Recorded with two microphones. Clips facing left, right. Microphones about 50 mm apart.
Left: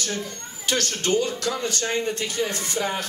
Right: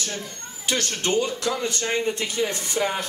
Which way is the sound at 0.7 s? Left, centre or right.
Right.